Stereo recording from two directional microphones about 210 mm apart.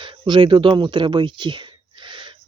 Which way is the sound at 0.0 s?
20° right (ahead or behind).